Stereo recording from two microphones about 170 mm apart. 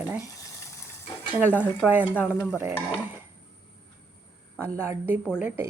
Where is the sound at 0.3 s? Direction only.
20° left (ahead or behind).